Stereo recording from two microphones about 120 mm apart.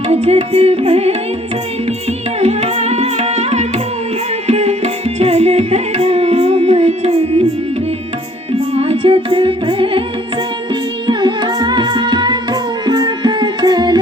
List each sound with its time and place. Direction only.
0.1 s music: 60° right (ahead or behind)
4.4 s tabla: 65° right (ahead or behind)
8.5 s music: 55° right (ahead or behind)
11.0 s music: 40° right (ahead or behind)